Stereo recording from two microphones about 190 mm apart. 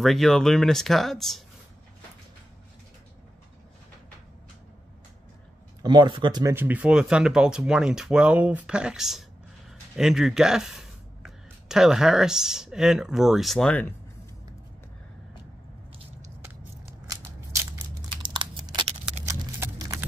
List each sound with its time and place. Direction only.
0.0 s speech: centre (ahead or behind)
5.8 s speech: 25° right (ahead or behind)
6.5 s speech: 10° right (ahead or behind); by 13.9 s 5° left (ahead or behind)
17.1 s scissors: 15° right (ahead or behind)
19.6 s clip-clop: 15° right (ahead or behind)